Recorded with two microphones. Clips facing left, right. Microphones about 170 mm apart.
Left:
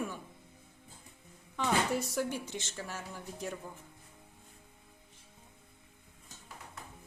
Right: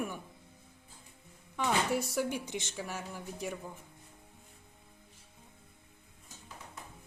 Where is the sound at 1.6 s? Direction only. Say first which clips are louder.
Even; 10° right (ahead or behind).